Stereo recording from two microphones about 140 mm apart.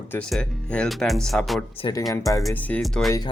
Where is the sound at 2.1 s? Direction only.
20° left (ahead or behind).